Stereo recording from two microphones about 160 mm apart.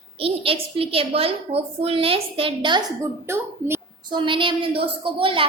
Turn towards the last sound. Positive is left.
turn(degrees=-35)  # may be behind; listen again after turning